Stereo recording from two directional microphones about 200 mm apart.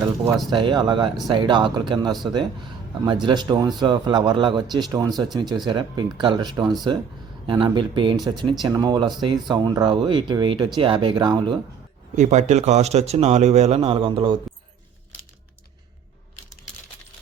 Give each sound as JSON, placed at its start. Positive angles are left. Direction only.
{"t": 0.5, "sound": "speech", "side_deg": -25}
{"t": 12.1, "sound": "speech", "side_deg": -35}